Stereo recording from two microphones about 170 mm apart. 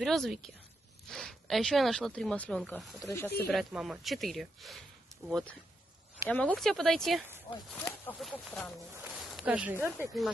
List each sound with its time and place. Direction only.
0.0 s speech: centre (ahead or behind)
3.0 s speech: 15° left (ahead or behind)
3.4 s speech: centre (ahead or behind)
8.2 s speech: centre (ahead or behind)
8.9 s a sound: 10° right (ahead or behind)
9.2 s speech: 5° right (ahead or behind)